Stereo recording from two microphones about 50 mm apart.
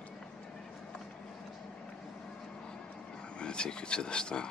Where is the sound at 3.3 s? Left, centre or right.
Centre.